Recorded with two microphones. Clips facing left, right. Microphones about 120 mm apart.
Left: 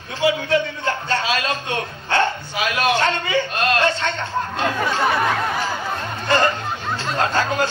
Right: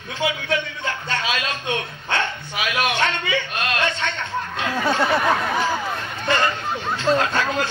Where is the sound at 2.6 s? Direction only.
35° left (ahead or behind).